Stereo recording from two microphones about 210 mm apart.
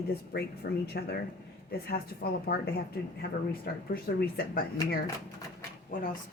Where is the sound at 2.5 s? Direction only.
50° left (ahead or behind).